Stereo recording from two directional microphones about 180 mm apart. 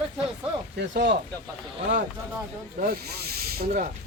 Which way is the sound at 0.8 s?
70° right (ahead or behind).